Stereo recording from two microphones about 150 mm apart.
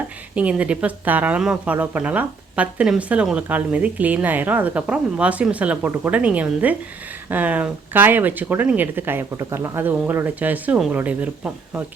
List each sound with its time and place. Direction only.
0.3 s speech: 10° right (ahead or behind)